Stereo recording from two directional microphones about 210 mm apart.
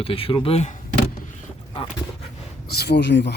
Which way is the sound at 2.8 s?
55° left (ahead or behind).